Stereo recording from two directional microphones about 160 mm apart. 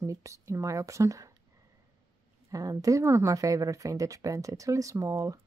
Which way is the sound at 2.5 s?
20° right (ahead or behind).